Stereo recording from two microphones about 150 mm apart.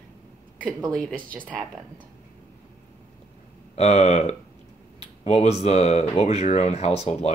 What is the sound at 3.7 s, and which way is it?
Speech, 45° left (ahead or behind).